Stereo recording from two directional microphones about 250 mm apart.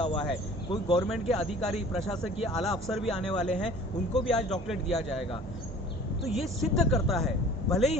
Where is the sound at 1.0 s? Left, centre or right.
Centre.